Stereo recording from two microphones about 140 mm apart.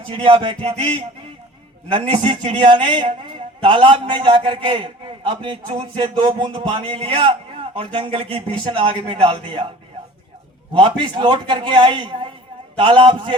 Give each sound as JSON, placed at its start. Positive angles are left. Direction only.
{"t": 0.1, "sound": "a man's voice", "side_deg": -40}
{"t": 2.0, "sound": "a man's voice", "side_deg": -35}
{"t": 10.8, "sound": "a man's voice", "side_deg": -35}